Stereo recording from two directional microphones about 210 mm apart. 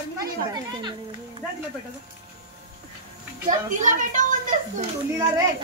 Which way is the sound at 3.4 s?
35° right (ahead or behind).